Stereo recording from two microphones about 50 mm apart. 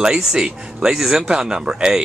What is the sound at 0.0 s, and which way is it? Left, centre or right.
Speech, centre.